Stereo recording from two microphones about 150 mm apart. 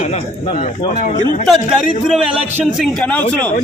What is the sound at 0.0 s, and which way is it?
Speech, 50° left (ahead or behind).